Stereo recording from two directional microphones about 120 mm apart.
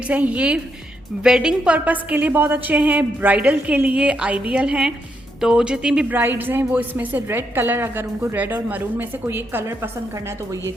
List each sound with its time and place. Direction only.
0.1 s a woman's voice: 10° right (ahead or behind)